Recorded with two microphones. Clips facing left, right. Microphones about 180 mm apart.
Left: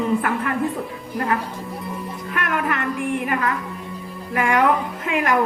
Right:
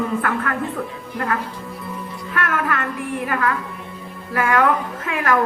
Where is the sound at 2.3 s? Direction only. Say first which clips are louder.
Right 1 dB; 20° left (ahead or behind).